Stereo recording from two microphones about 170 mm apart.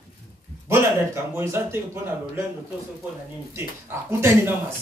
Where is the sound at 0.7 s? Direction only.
15° right (ahead or behind).